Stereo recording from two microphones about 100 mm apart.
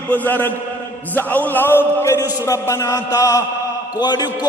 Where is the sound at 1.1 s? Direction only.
15° left (ahead or behind).